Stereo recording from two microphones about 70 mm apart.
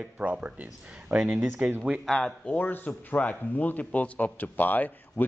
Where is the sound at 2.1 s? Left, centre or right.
Centre.